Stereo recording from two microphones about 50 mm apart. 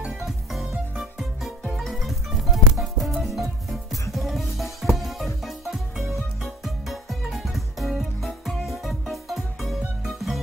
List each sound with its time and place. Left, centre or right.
0.0 s music: centre